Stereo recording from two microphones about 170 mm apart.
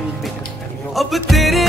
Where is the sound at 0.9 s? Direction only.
Centre (ahead or behind).